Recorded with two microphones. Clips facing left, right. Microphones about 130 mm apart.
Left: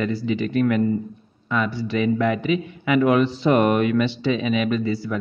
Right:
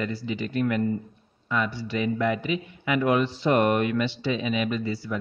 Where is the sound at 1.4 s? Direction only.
75° left (ahead or behind).